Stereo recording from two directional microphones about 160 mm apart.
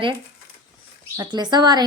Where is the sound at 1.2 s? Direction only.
25° right (ahead or behind).